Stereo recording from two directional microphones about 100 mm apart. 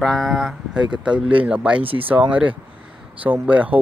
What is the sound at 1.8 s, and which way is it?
Speech, 65° right (ahead or behind).